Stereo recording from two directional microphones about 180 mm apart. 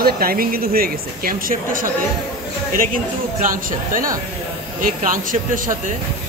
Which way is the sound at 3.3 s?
50° right (ahead or behind).